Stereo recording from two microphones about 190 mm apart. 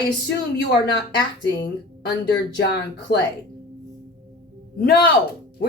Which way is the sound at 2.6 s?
65° left (ahead or behind).